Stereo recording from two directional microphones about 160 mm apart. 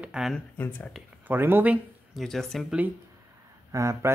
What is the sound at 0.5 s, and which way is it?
Speech, 10° left (ahead or behind).